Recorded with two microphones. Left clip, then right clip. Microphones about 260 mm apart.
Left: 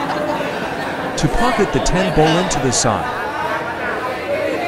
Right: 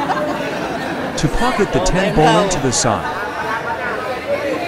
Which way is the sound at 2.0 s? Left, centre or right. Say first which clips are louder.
Right 2 dB; centre.